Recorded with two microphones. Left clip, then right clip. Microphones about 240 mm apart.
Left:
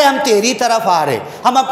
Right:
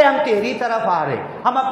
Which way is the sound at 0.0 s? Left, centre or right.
Left.